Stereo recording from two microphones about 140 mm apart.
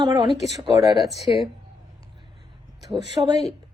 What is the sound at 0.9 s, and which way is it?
Speech, centre (ahead or behind).